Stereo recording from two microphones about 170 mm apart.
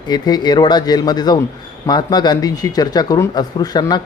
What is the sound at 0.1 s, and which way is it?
Speech, 25° left (ahead or behind).